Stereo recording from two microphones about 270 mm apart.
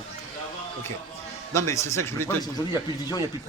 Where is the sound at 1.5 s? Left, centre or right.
Centre.